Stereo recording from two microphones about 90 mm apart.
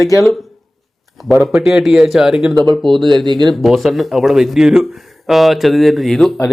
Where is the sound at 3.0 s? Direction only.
60° right (ahead or behind).